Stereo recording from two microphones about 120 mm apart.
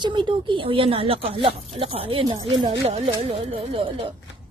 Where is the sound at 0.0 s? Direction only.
40° right (ahead or behind).